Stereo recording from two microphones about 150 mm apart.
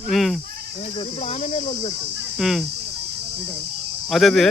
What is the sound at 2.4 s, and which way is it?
Speech, centre (ahead or behind).